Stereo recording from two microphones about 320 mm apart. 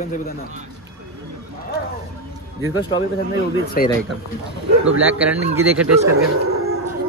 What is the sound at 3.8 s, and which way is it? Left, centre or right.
Speech, left.